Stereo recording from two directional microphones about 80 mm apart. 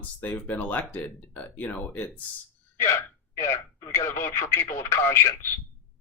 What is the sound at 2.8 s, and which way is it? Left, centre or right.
Speech, left.